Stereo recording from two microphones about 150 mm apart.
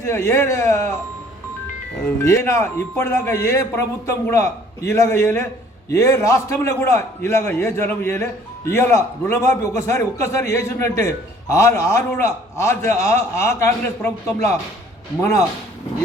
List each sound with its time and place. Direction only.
0.0 s a man's voice: 20° left (ahead or behind)
2.2 s a man's voice: 20° left (ahead or behind)